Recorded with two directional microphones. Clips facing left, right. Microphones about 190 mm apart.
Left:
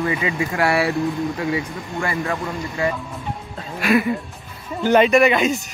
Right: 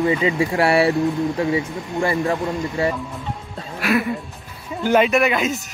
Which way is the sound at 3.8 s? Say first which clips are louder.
Left 2 dB; centre (ahead or behind).